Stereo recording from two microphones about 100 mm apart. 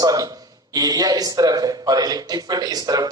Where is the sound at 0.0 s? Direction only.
35° right (ahead or behind).